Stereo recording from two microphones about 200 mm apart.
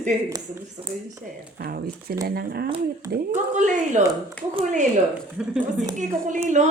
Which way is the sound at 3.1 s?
40° right (ahead or behind).